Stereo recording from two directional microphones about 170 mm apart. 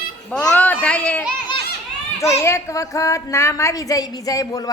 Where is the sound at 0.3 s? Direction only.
5° left (ahead or behind).